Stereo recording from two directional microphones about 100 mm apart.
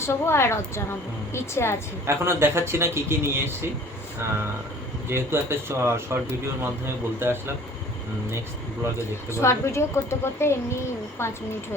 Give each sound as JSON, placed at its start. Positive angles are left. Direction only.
{"t": 0.0, "sound": "a woman's voice", "side_deg": 25}
{"t": 2.0, "sound": "a man's voice", "side_deg": -25}
{"t": 5.0, "sound": "a man's voice", "side_deg": -25}
{"t": 9.3, "sound": "a woman's voice", "side_deg": 30}